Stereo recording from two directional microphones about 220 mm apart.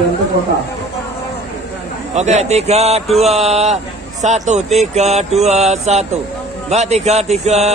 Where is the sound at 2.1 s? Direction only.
30° right (ahead or behind).